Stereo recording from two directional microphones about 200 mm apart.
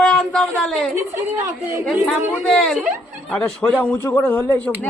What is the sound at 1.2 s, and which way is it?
Speech, 10° right (ahead or behind).